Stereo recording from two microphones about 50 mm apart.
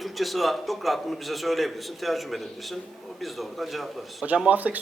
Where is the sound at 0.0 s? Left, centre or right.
Centre.